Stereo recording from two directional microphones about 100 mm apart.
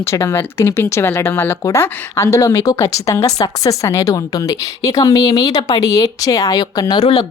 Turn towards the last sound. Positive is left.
turn(degrees=45)  # may be behind; listen again after turning